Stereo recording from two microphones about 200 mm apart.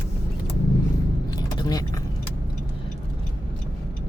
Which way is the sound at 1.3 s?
20° left (ahead or behind).